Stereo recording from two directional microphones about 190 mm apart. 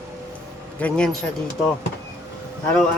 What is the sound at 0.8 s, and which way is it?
Speech, 5° left (ahead or behind).